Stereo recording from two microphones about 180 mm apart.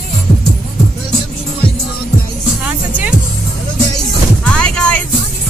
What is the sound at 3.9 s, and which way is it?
Music, 5° left (ahead or behind).